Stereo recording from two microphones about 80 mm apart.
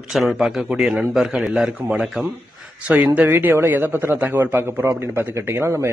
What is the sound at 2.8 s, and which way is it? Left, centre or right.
Speech, centre.